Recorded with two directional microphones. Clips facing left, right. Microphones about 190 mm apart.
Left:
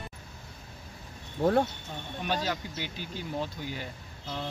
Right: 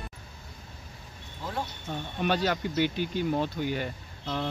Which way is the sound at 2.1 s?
60° right (ahead or behind).